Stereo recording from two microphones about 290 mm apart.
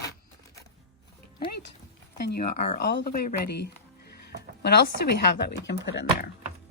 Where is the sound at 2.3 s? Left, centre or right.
Left.